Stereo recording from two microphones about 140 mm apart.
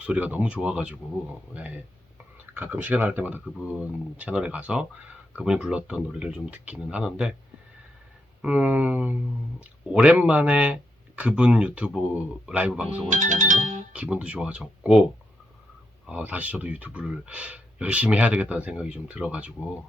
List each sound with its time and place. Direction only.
0.0 s speech: 10° right (ahead or behind)
8.4 s speech: 10° right (ahead or behind)
13.1 s music: 65° right (ahead or behind)
13.9 s speech: 10° right (ahead or behind)
16.0 s speech: 10° right (ahead or behind)